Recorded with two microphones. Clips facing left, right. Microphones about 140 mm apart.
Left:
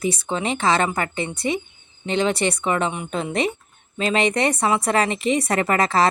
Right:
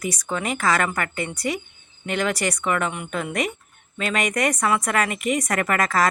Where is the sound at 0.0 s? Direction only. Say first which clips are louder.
Left 3 dB; 25° left (ahead or behind).